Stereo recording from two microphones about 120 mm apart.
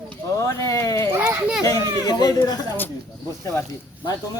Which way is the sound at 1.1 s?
15° right (ahead or behind).